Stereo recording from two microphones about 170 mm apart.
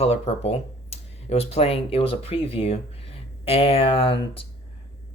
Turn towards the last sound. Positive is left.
turn(degrees=35)  # may be behind; listen again after turning